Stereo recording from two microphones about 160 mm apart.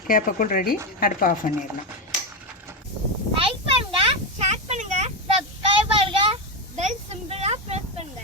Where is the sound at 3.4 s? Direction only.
35° right (ahead or behind).